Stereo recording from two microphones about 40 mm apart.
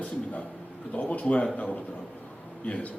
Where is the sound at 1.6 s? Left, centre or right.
Left.